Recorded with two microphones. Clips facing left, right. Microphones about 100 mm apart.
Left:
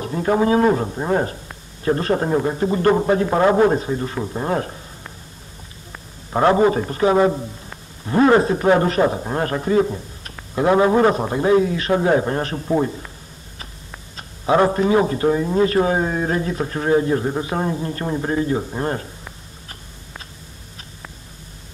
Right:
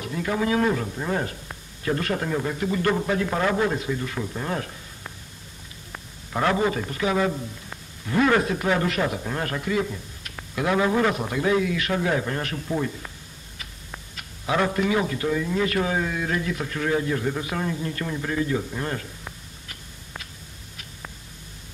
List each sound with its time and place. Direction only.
0.0 s a man's voice: 35° left (ahead or behind)
6.3 s a man's voice: 30° left (ahead or behind)
14.1 s a man's voice: 35° left (ahead or behind)